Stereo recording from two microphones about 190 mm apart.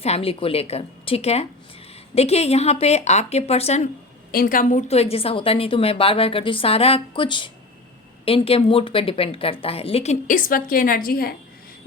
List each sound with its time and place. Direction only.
0.0 s a woman's voice: 30° left (ahead or behind)
4.3 s a woman's voice: 50° left (ahead or behind)